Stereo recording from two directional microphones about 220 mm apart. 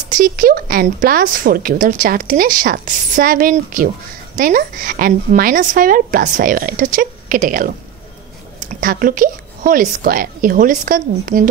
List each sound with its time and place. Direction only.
0.1 s a woman's voice: 40° right (ahead or behind)